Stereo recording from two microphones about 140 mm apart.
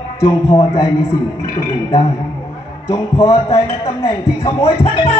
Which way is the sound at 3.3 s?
45° left (ahead or behind).